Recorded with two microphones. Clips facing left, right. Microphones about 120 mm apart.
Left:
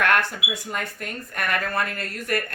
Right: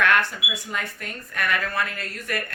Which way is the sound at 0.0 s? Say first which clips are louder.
Even; 50° left (ahead or behind).